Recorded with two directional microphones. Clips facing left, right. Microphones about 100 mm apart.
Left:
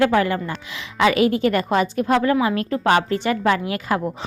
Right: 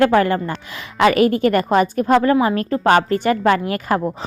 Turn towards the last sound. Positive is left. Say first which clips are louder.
# right 3 dB
turn(degrees=-45)  # may be behind; listen again after turning